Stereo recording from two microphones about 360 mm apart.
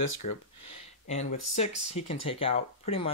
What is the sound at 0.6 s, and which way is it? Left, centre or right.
Speech, centre.